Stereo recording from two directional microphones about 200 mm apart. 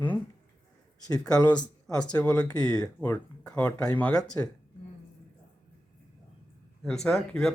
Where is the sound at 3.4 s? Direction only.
5° left (ahead or behind).